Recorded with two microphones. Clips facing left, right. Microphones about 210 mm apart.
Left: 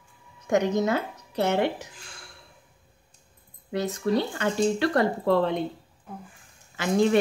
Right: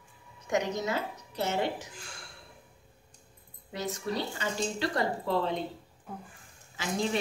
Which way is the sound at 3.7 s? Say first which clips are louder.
Left 8 dB; 60° left (ahead or behind).